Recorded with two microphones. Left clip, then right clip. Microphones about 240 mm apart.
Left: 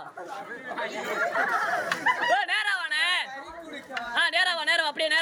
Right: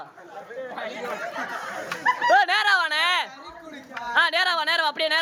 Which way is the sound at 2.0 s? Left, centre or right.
Centre.